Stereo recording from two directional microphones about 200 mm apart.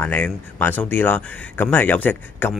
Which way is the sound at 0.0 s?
10° left (ahead or behind).